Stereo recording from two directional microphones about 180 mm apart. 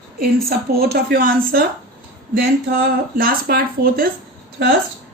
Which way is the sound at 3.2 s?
55° right (ahead or behind).